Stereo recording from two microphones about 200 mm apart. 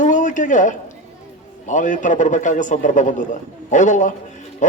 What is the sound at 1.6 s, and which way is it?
A man's voice, 40° left (ahead or behind).